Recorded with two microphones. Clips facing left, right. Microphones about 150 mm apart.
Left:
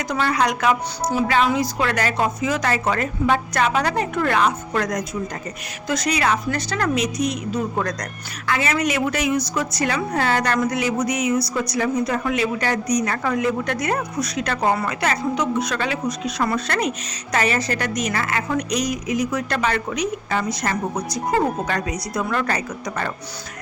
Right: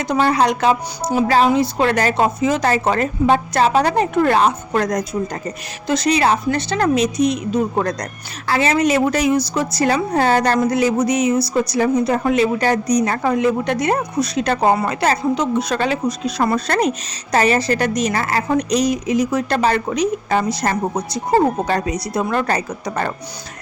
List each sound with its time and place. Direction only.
0.0 s a woman's voice: 25° right (ahead or behind)
1.0 s speech: 5° right (ahead or behind)
1.5 s a woman's voice: 25° right (ahead or behind)